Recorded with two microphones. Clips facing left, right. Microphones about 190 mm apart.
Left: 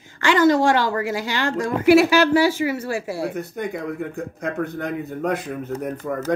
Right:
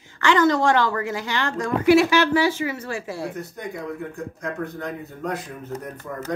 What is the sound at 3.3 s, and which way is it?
Speech, 60° left (ahead or behind).